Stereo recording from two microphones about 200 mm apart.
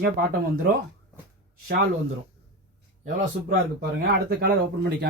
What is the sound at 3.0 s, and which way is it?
Speech, 40° right (ahead or behind).